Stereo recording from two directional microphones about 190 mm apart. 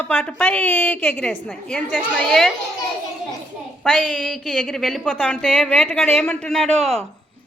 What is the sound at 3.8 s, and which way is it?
A woman's voice, centre (ahead or behind).